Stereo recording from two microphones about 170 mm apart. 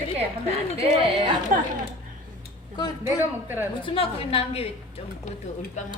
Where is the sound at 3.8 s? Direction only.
35° left (ahead or behind).